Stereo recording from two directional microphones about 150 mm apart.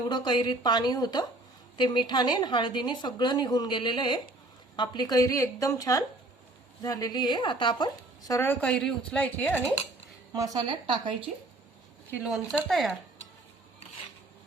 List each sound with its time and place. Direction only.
0.1 s a woman's voice: 30° left (ahead or behind); by 9.7 s 15° left (ahead or behind)
10.3 s speech: 25° right (ahead or behind)
12.1 s speech: 5° right (ahead or behind)